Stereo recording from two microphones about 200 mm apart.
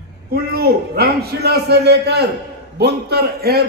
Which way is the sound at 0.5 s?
50° right (ahead or behind).